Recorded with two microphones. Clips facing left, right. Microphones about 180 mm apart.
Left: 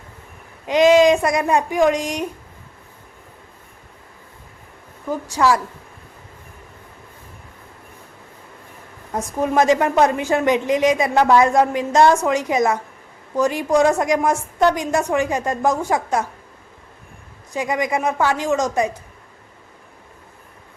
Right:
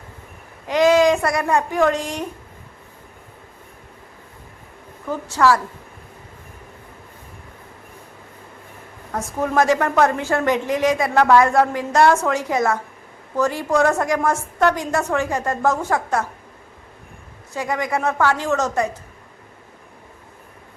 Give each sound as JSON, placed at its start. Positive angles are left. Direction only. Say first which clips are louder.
{"t": 0.7, "sound": "a woman's voice", "louder": "left 2 dB", "side_deg": 20}
{"t": 5.0, "sound": "a woman's voice", "louder": "even", "side_deg": 10}
{"t": 9.1, "sound": "a woman's voice", "louder": "left 1 dB", "side_deg": 20}
{"t": 17.5, "sound": "a woman's voice", "louder": "left 2 dB", "side_deg": 15}